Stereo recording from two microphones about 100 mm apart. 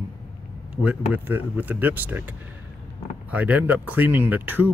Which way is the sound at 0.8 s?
15° right (ahead or behind).